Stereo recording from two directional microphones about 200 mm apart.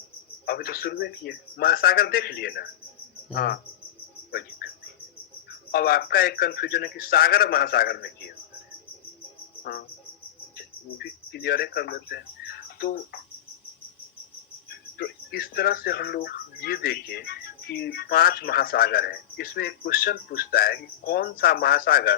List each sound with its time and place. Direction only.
0.4 s speech: 50° left (ahead or behind)
4.3 s a sound: 50° left (ahead or behind)
5.5 s speech: 50° left (ahead or behind)
10.6 s speech: 55° left (ahead or behind)
14.7 s speech: 50° left (ahead or behind)